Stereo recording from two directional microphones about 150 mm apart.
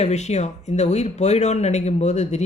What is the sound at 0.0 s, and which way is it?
Speech, 50° left (ahead or behind).